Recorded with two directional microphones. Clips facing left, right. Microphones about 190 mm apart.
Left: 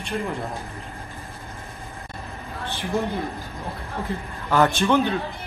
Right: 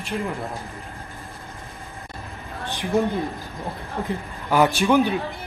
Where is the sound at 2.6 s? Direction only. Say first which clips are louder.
Right 4 dB; 15° right (ahead or behind).